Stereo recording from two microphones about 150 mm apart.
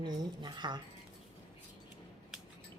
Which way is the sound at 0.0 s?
30° right (ahead or behind).